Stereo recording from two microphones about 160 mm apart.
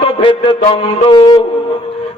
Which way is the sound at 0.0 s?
35° left (ahead or behind).